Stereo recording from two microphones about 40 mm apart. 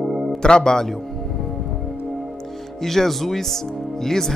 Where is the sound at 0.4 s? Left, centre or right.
Centre.